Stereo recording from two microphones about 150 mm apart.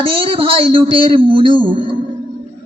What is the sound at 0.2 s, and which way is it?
A man's voice, 35° right (ahead or behind).